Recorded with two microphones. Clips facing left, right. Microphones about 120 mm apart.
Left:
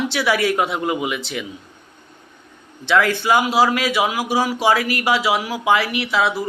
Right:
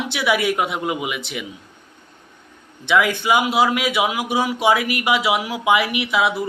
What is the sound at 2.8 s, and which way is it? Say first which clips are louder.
A man's voice: left 1 dB; 15° right (ahead or behind).